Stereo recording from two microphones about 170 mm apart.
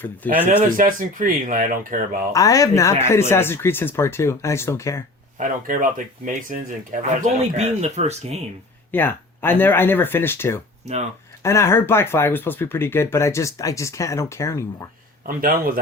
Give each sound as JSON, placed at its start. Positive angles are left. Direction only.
{"t": 0.2, "sound": "speech", "side_deg": 10}
{"t": 0.8, "sound": "speech", "side_deg": -50}
{"t": 2.3, "sound": "speech", "side_deg": 20}
{"t": 5.4, "sound": "speech", "side_deg": -50}
{"t": 8.9, "sound": "speech", "side_deg": 10}
{"t": 10.8, "sound": "speech", "side_deg": -45}
{"t": 11.4, "sound": "speech", "side_deg": 15}
{"t": 15.4, "sound": "speech", "side_deg": -55}